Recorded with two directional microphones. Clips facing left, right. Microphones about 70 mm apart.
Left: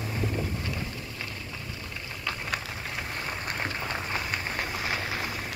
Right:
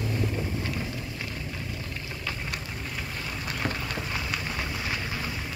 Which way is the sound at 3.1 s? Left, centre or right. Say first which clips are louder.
Left 1 dB; left.